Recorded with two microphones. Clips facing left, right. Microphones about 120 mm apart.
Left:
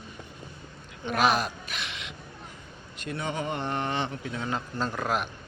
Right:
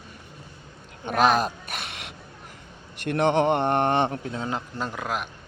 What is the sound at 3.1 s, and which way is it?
A man's voice, 70° right (ahead or behind).